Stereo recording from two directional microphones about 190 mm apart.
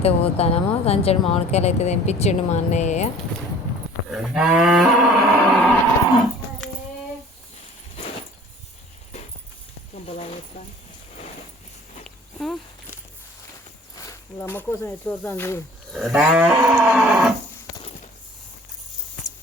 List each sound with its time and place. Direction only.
0.0 s speech: 35° left (ahead or behind)
4.1 s cattle: 5° right (ahead or behind)
10.1 s a sound: 30° left (ahead or behind)
12.0 s a sound: centre (ahead or behind)
13.9 s snake: 15° left (ahead or behind)
15.9 s livestock: centre (ahead or behind)